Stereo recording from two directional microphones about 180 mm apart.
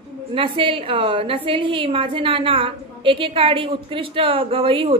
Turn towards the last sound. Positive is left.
turn(degrees=-30)  # may be behind; listen again after turning